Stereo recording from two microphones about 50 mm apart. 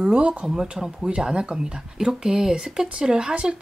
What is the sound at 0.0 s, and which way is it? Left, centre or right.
Speech, right.